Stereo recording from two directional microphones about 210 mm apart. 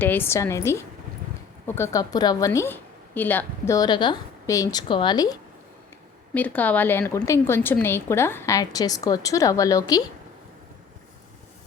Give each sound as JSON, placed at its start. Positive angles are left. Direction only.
{"t": 0.0, "sound": "a woman's voice", "side_deg": 10}
{"t": 6.3, "sound": "a woman's voice", "side_deg": 5}